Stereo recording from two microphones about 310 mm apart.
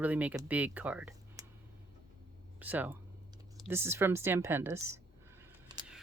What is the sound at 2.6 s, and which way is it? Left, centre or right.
Speech, centre.